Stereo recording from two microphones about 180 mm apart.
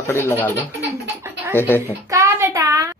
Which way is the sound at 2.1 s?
15° right (ahead or behind).